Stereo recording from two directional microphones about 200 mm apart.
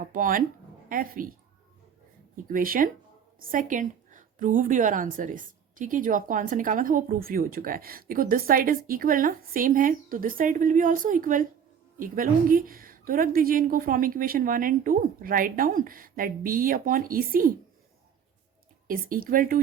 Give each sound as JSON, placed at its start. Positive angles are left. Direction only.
{"t": 0.0, "sound": "a woman's voice", "side_deg": -45}
{"t": 18.9, "sound": "a woman's voice", "side_deg": -45}